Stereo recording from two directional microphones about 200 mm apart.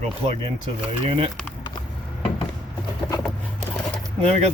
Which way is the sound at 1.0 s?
30° right (ahead or behind).